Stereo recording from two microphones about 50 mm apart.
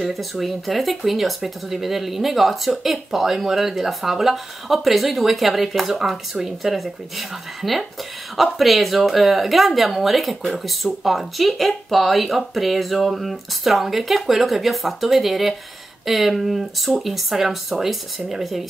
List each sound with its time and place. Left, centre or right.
0.0 s speech: centre